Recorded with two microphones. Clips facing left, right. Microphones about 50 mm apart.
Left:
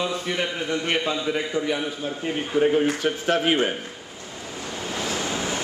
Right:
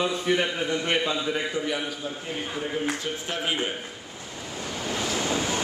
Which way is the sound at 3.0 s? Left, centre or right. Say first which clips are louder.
Left 8 dB; left.